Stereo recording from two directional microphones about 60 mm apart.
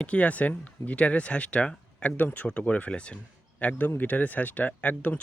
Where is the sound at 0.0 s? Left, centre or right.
Left.